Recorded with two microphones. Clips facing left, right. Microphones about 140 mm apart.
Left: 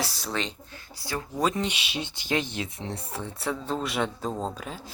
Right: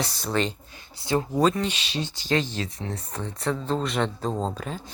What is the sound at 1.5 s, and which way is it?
Speech, 15° left (ahead or behind).